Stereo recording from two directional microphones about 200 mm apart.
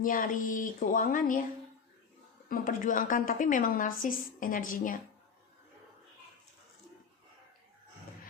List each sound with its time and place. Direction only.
0.0 s a woman's voice: 45° left (ahead or behind)
2.5 s a woman's voice: 40° left (ahead or behind)